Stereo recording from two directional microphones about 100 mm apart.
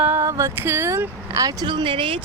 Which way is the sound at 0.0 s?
25° right (ahead or behind).